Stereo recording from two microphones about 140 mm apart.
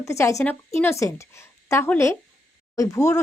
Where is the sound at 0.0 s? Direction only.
20° left (ahead or behind).